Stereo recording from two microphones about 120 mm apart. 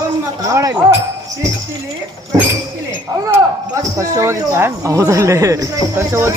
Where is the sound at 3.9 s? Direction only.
25° right (ahead or behind).